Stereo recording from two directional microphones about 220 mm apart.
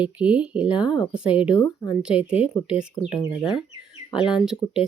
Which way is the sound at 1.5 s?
20° left (ahead or behind).